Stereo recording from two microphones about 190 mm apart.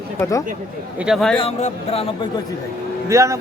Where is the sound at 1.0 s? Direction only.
Centre (ahead or behind).